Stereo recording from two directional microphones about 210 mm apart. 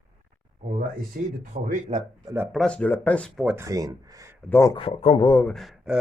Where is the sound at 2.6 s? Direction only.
5° left (ahead or behind).